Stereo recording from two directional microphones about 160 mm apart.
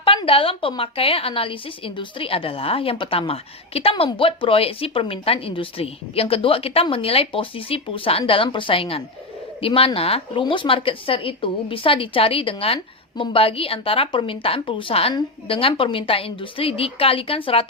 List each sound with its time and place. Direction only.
0.0 s a woman's voice: 35° left (ahead or behind)